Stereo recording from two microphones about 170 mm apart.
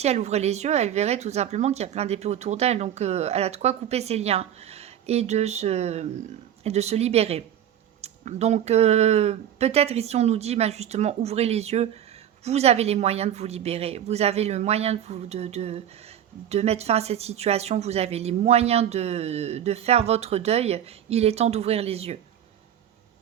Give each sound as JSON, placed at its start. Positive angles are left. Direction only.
{"t": 0.0, "sound": "speech", "side_deg": -40}